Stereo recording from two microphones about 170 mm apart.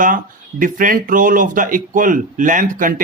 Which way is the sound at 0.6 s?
55° right (ahead or behind).